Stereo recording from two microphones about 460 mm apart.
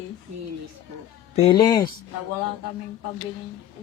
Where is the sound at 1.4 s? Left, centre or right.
Centre.